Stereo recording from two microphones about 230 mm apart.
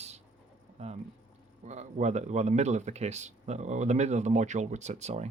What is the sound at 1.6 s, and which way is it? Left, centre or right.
Speech, right.